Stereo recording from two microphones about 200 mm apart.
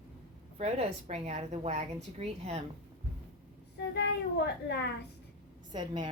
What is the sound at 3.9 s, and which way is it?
A child's voice, 60° left (ahead or behind).